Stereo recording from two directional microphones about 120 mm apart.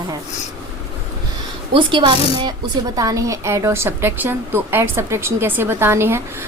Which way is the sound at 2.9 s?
30° right (ahead or behind).